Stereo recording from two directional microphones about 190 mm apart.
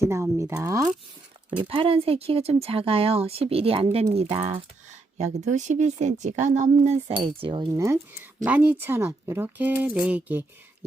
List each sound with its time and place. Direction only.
0.0 s speech: 15° right (ahead or behind)
1.5 s speech: 25° right (ahead or behind)
6.7 s cutlery: 30° right (ahead or behind)
7.7 s speech: 15° right (ahead or behind)